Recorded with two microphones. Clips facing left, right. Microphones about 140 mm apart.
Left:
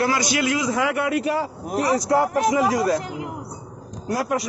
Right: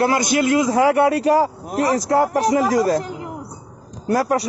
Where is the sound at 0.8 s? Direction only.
35° right (ahead or behind).